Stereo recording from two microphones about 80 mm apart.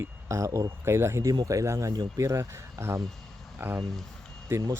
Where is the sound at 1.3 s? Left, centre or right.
Right.